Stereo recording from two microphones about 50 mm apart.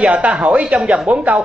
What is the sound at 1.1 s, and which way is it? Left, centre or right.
Speech, right.